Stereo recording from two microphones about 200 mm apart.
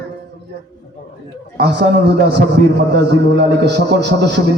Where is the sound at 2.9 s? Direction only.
60° right (ahead or behind).